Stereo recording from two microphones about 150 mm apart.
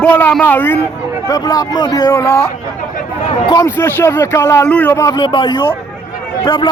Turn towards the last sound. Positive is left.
turn(degrees=30)  # may be behind; listen again after turning